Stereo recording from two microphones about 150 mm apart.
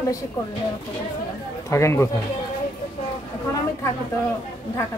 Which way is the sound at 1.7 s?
20° left (ahead or behind).